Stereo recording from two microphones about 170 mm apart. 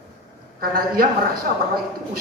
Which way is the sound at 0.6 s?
60° right (ahead or behind).